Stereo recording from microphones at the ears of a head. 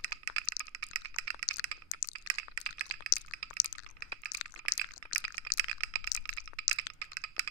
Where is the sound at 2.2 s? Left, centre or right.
Right.